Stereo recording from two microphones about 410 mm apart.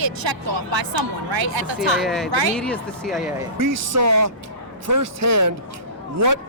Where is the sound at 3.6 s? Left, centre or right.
Right.